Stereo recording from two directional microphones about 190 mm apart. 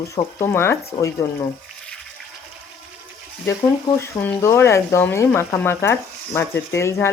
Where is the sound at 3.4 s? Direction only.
15° left (ahead or behind).